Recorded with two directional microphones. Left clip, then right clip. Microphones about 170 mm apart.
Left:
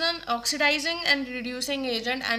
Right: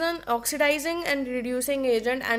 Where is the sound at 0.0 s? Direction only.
55° right (ahead or behind).